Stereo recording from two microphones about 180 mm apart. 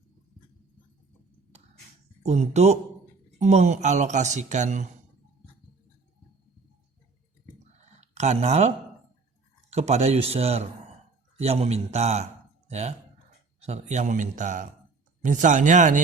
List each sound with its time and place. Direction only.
2.2 s speech: 40° right (ahead or behind)
7.9 s a man's voice: 40° right (ahead or behind)